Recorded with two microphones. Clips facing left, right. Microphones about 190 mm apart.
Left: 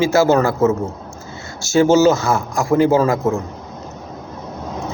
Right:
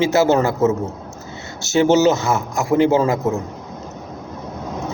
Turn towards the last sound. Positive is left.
turn(degrees=-20)  # may be behind; listen again after turning